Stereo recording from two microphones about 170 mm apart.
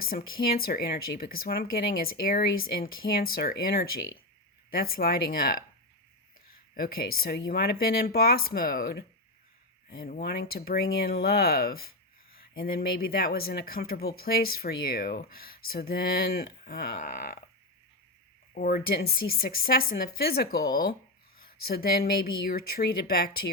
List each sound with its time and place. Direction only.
0.0 s speech: 60° left (ahead or behind)
6.7 s speech: 60° left (ahead or behind)
18.5 s speech: 60° left (ahead or behind)